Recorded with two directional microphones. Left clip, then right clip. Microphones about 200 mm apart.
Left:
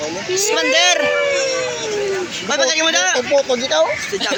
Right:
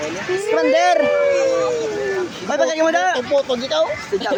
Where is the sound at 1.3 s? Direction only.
60° right (ahead or behind).